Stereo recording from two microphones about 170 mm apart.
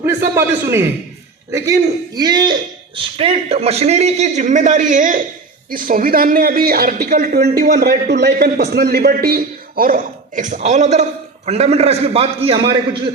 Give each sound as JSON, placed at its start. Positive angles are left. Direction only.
{"t": 0.3, "sound": "a man's voice", "side_deg": -15}